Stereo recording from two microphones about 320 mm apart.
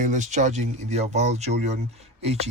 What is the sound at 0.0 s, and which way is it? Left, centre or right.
Speech, right.